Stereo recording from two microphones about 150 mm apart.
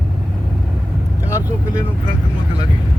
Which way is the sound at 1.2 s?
20° left (ahead or behind).